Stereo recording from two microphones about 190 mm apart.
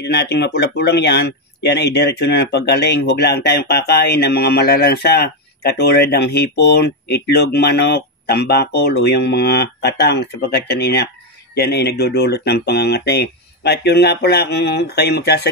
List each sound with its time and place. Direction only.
0.1 s speech: 60° left (ahead or behind)